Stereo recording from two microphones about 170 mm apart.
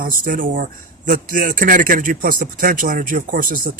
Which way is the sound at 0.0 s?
55° right (ahead or behind).